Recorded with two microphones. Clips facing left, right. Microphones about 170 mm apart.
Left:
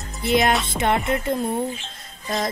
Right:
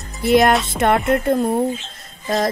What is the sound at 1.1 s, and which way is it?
Speech, 50° right (ahead or behind).